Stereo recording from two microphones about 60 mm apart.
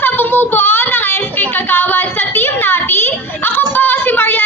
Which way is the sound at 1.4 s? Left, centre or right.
Left.